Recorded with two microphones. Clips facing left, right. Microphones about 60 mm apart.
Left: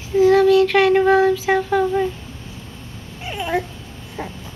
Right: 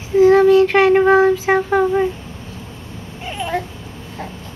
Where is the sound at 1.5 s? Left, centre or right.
Right.